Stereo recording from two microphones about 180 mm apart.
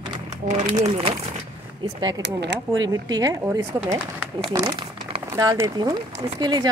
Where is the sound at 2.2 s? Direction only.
75° right (ahead or behind).